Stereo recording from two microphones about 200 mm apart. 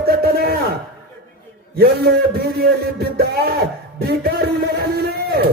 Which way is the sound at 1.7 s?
55° right (ahead or behind).